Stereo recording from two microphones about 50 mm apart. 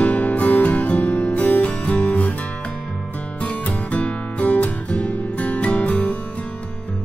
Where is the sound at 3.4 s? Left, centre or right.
Left.